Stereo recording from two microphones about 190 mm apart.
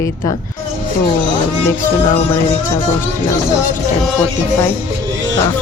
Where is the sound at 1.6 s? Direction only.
15° left (ahead or behind).